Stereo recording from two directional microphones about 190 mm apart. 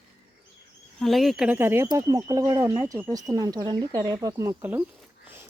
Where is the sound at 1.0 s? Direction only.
Centre (ahead or behind).